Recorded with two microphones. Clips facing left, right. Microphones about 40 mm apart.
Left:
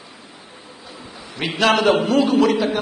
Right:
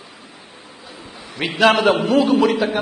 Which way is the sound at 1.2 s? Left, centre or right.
Right.